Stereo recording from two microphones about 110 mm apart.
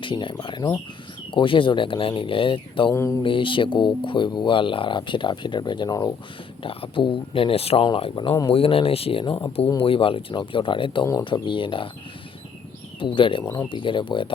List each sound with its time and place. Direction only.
0.0 s speech: 50° left (ahead or behind)
2.9 s speech: 25° left (ahead or behind)
3.2 s speech: 50° left (ahead or behind)
6.6 s speech: 55° left (ahead or behind)
7.9 s speech: 55° left (ahead or behind)
13.0 s speech: 50° left (ahead or behind)